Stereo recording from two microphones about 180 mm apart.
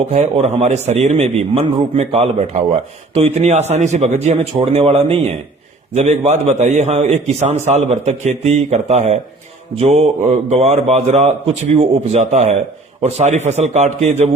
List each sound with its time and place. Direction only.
0.1 s a man's voice: 35° right (ahead or behind)